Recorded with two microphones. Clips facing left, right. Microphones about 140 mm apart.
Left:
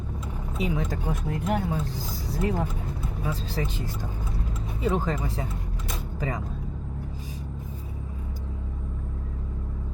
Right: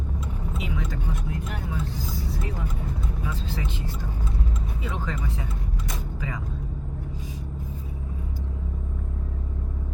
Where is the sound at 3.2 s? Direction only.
40° left (ahead or behind).